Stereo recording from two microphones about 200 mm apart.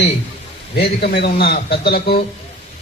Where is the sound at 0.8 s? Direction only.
50° left (ahead or behind).